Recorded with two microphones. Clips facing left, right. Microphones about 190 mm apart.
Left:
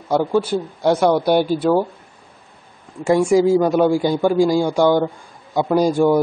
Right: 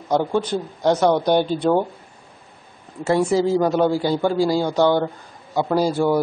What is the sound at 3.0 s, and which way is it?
A man's voice, 10° left (ahead or behind).